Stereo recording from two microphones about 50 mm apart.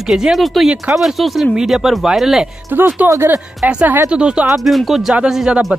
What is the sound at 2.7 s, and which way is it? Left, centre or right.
Speech, right.